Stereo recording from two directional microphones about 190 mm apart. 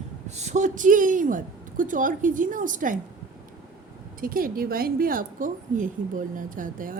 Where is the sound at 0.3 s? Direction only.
35° right (ahead or behind).